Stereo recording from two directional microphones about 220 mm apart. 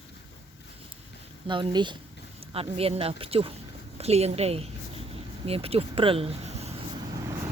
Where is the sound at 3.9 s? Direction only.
30° right (ahead or behind).